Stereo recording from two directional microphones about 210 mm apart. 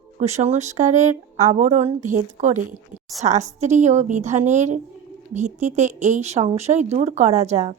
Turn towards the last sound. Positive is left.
turn(degrees=-30)  # may be behind; listen again after turning